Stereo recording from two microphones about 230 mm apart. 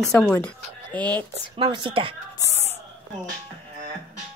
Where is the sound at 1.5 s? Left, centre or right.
Centre.